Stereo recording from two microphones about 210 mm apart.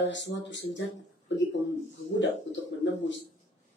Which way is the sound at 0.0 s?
60° left (ahead or behind).